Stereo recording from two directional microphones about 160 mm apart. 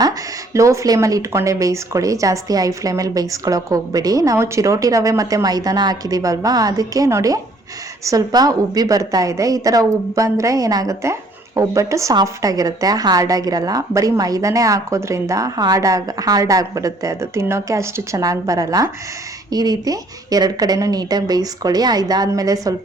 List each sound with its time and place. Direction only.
0.0 s a woman's voice: 20° right (ahead or behind)